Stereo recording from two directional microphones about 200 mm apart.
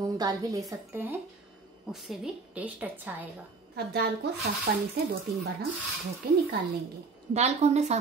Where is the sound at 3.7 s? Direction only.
55° right (ahead or behind).